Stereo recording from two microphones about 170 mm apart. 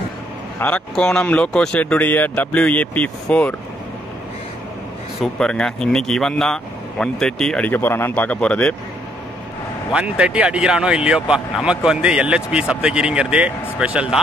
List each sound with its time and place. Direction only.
0.6 s speech: 5° left (ahead or behind)
5.2 s speech: 5° left (ahead or behind)
9.9 s speech: 5° right (ahead or behind)